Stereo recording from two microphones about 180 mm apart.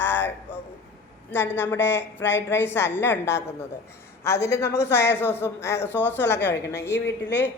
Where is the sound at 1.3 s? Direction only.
10° left (ahead or behind).